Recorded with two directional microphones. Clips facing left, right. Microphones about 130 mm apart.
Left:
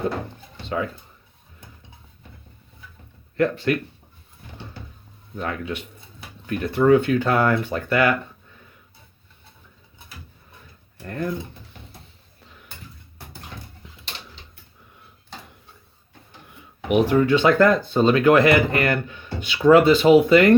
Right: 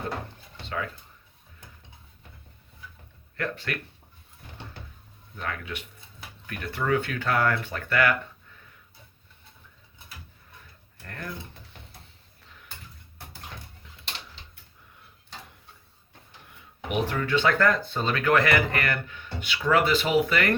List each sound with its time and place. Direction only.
0.7 s speech: 25° left (ahead or behind)
3.3 s speech: 20° left (ahead or behind)
5.4 s speech: 25° left (ahead or behind)
11.0 s speech: 20° left (ahead or behind)
16.9 s speech: 15° left (ahead or behind)